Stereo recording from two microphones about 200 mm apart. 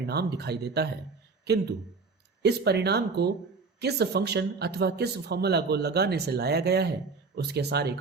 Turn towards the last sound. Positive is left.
turn(degrees=-55)  # may be behind; listen again after turning